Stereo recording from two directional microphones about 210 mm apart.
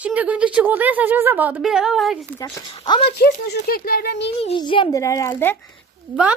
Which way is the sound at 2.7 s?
25° left (ahead or behind).